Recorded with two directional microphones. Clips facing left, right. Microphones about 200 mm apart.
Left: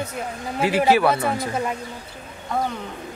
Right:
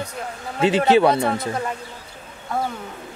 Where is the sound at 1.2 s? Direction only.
5° left (ahead or behind).